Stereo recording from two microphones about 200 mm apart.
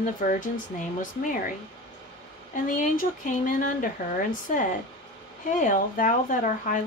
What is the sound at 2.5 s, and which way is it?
Speech, 40° left (ahead or behind).